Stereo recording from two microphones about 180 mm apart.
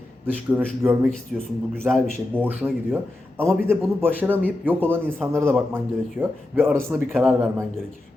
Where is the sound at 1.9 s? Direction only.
15° right (ahead or behind).